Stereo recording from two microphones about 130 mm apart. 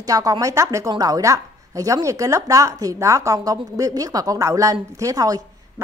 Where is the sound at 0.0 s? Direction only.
30° right (ahead or behind).